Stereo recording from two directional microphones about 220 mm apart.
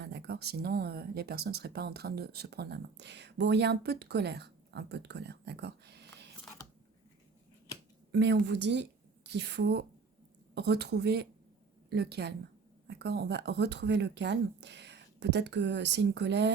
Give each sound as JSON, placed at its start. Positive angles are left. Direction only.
{"t": 0.0, "sound": "speech", "side_deg": -50}
{"t": 8.1, "sound": "a woman's voice", "side_deg": -50}